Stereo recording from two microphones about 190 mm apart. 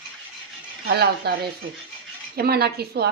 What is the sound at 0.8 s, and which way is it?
Speech, 55° right (ahead or behind).